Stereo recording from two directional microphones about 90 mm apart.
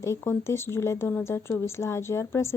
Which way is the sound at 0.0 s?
30° left (ahead or behind).